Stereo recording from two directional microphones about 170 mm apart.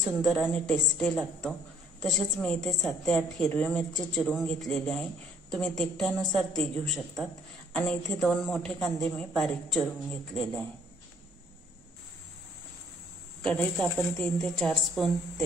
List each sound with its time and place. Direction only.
0.0 s a man's voice: centre (ahead or behind)
13.4 s a man's voice: 5° left (ahead or behind)